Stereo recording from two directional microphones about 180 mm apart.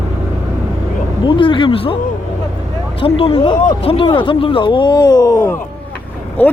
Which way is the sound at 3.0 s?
30° left (ahead or behind).